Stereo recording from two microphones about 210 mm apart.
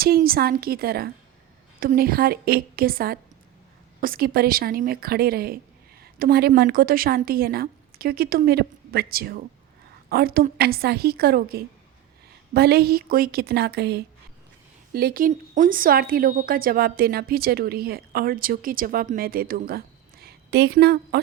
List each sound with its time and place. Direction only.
0.0 s a woman's voice: 45° right (ahead or behind)